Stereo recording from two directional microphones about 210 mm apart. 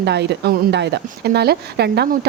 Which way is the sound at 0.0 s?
55° right (ahead or behind).